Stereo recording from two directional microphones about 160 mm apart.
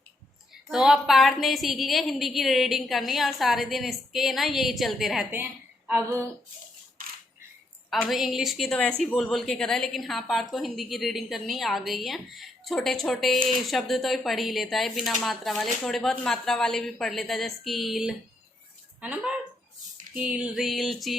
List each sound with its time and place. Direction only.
0.7 s a woman's voice: 5° right (ahead or behind)
5.9 s a sound: 15° right (ahead or behind)
8.0 s a woman's voice: centre (ahead or behind)